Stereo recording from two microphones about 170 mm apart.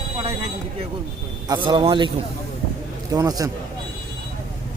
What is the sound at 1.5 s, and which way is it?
Speech, 25° right (ahead or behind).